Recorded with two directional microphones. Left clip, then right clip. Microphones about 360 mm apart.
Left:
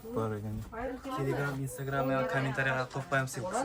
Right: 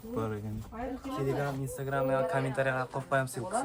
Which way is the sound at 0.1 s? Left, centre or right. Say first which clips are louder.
Even; centre.